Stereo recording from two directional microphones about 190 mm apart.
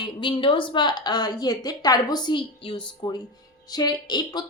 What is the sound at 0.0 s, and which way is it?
A woman's voice, 25° left (ahead or behind).